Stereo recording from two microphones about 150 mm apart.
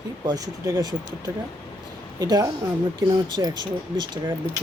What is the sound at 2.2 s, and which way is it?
Speech, 25° right (ahead or behind).